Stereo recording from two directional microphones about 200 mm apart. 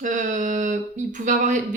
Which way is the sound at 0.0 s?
40° right (ahead or behind).